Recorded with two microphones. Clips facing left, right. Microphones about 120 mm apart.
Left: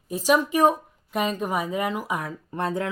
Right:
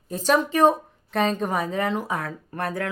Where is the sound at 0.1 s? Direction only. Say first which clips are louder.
Even; 10° left (ahead or behind).